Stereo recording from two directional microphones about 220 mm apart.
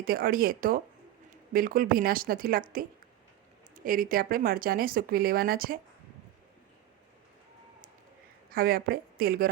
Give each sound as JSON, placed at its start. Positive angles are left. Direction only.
{"t": 0.0, "sound": "speech", "side_deg": -40}
{"t": 8.4, "sound": "a woman's voice", "side_deg": -40}